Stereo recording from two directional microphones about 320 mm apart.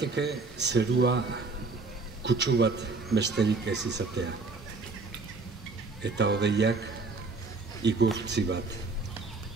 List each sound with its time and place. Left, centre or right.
0.0 s a man's voice: right
6.0 s a man's voice: right